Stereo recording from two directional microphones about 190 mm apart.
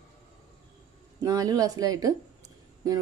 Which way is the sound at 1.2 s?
20° right (ahead or behind).